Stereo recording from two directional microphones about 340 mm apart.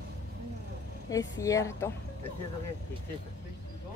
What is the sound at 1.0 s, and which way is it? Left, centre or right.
Speech, centre.